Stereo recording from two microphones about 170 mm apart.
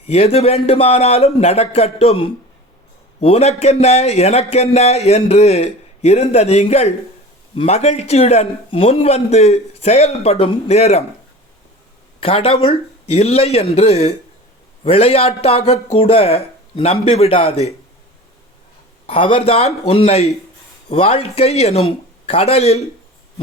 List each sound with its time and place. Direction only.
0.0 s a man's voice: 35° left (ahead or behind)
12.2 s a man's voice: 35° left (ahead or behind)
19.0 s a man's voice: 30° left (ahead or behind)